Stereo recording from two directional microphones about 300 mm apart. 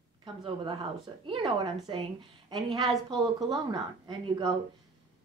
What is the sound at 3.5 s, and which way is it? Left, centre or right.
Speech, centre.